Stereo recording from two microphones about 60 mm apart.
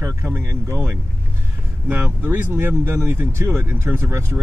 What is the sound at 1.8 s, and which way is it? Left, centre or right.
Speech, right.